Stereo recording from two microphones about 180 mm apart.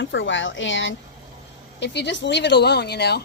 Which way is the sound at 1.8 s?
75° left (ahead or behind).